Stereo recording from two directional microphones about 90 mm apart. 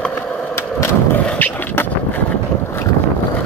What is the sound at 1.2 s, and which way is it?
Skateboard, 20° left (ahead or behind).